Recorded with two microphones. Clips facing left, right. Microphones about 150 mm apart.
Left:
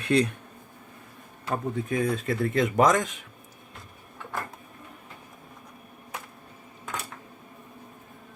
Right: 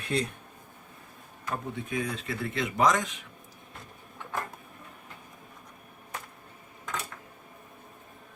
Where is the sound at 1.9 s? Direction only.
45° left (ahead or behind).